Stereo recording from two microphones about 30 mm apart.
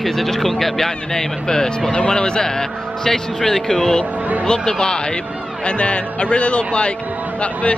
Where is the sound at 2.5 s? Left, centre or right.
Centre.